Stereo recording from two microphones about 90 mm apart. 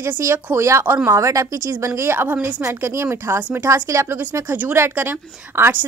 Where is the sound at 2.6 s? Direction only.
30° right (ahead or behind).